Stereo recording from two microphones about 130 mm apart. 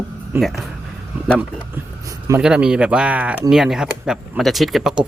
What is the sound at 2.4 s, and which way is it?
Speech, 5° right (ahead or behind).